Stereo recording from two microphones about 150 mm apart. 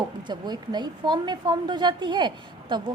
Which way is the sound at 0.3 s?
30° right (ahead or behind).